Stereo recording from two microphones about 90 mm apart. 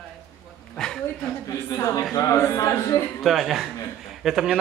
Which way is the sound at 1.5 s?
40° left (ahead or behind).